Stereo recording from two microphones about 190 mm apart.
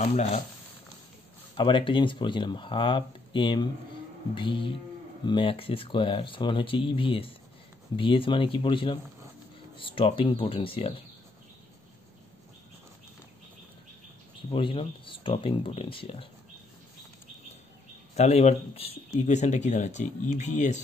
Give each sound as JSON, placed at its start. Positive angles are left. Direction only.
{"t": 0.0, "sound": "speech", "side_deg": 35}
{"t": 1.6, "sound": "speech", "side_deg": 25}
{"t": 14.5, "sound": "speech", "side_deg": 25}
{"t": 18.1, "sound": "speech", "side_deg": 35}